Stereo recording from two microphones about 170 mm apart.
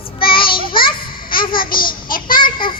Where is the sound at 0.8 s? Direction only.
60° left (ahead or behind).